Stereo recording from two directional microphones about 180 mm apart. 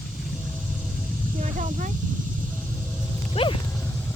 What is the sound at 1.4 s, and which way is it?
Speech, 45° right (ahead or behind).